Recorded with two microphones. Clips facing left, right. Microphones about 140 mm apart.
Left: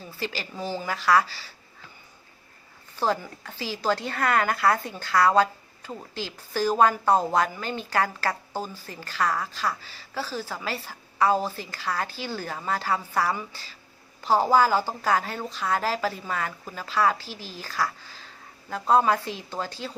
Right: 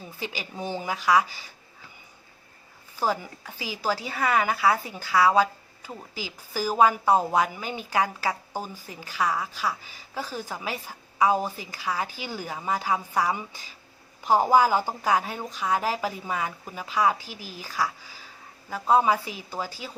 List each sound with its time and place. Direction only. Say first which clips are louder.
0.2 s a woman's voice: left 2 dB; 15° right (ahead or behind)
2.9 s a woman's voice: left 1 dB; 10° right (ahead or behind)